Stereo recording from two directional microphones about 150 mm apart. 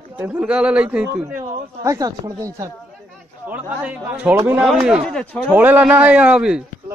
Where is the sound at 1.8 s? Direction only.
20° right (ahead or behind).